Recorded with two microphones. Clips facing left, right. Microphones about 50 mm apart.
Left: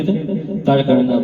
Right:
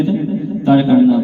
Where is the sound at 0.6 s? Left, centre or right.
Centre.